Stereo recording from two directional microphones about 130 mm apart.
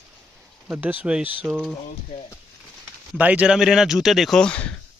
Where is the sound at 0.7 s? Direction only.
10° right (ahead or behind).